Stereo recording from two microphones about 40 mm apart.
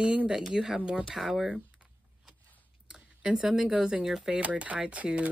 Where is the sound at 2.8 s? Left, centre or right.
Centre.